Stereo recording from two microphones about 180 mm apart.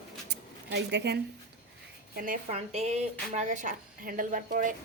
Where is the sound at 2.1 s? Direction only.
50° right (ahead or behind).